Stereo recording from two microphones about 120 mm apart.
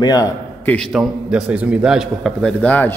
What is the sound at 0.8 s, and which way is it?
A man's voice, 5° right (ahead or behind).